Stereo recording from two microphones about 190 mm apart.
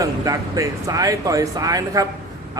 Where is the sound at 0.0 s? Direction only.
15° right (ahead or behind).